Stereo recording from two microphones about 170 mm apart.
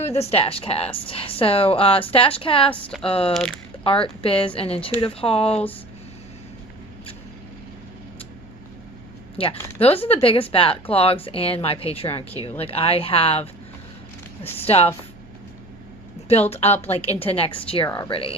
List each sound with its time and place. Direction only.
0.0 s speech: 40° left (ahead or behind)
9.8 s speech: 35° left (ahead or behind)
16.5 s speech: 40° left (ahead or behind)